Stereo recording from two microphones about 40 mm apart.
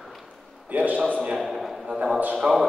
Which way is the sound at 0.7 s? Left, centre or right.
Right.